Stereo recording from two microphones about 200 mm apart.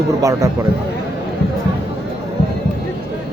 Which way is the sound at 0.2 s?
15° right (ahead or behind).